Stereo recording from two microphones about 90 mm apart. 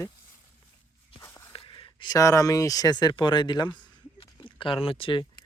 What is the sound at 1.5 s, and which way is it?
Whispering, 75° left (ahead or behind).